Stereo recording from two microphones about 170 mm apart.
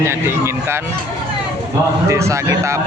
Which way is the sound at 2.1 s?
15° right (ahead or behind).